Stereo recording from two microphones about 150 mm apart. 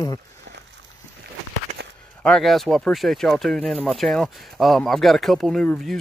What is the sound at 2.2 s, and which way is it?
Speech, 5° left (ahead or behind).